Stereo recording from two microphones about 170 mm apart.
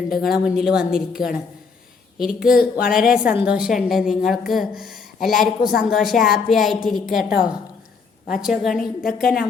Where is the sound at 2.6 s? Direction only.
60° left (ahead or behind).